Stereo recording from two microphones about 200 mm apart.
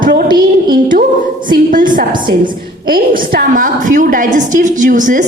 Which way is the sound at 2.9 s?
45° right (ahead or behind).